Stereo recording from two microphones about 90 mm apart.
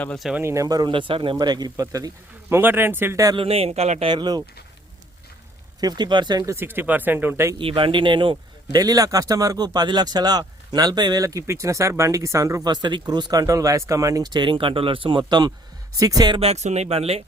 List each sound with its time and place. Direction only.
0.4 s speech: 35° right (ahead or behind)
0.9 s speech: 70° right (ahead or behind)
1.4 s speech: 50° right (ahead or behind)
2.5 s speech: 25° right (ahead or behind)
3.3 s speech: 90° right; by 4.4 s 50° right (ahead or behind)
5.8 s speech: 55° right (ahead or behind)
6.4 s speech: 30° right (ahead or behind)
7.6 s speech: 80° right
8.7 s speech: 45° right (ahead or behind)
12.6 s speech: 55° right (ahead or behind); by 14.3 s 35° right (ahead or behind)
14.3 s speech: 55° right (ahead or behind); by 15.2 s 75° right (ahead or behind)
15.3 s speech: 55° right (ahead or behind)
16.0 s speech: 40° right (ahead or behind)
16.9 s speech: 90° right